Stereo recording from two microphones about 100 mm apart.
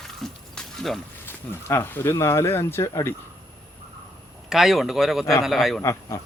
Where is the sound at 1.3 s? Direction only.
20° left (ahead or behind).